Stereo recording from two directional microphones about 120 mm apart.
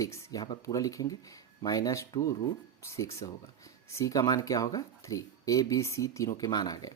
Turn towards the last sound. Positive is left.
turn(degrees=30)  # may be behind; listen again after turning